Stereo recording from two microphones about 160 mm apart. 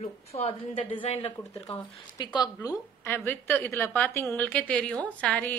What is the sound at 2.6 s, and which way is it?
A woman's voice, 15° left (ahead or behind).